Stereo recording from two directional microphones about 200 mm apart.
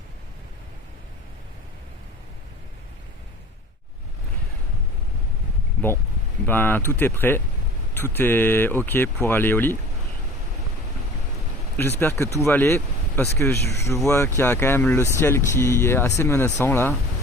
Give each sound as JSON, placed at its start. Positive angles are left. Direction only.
{"t": 6.4, "sound": "speech", "side_deg": 10}
{"t": 11.8, "sound": "speech", "side_deg": 10}